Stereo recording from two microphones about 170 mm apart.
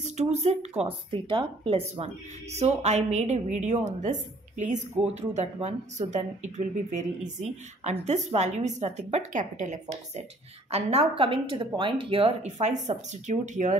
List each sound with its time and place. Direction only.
0.0 s a woman's voice: 40° right (ahead or behind)